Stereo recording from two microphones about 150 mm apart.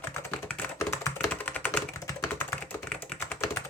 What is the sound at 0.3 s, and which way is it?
Typing, 15° left (ahead or behind).